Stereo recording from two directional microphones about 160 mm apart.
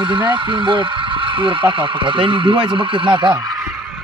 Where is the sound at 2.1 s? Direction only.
30° right (ahead or behind).